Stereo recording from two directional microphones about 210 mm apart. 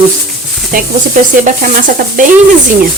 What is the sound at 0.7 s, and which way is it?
Speech, 40° right (ahead or behind).